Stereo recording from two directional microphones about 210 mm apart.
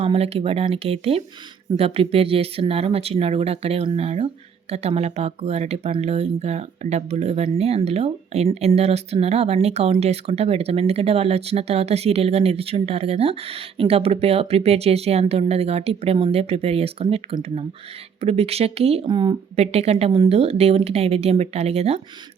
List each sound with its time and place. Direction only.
0.0 s speech: 25° right (ahead or behind)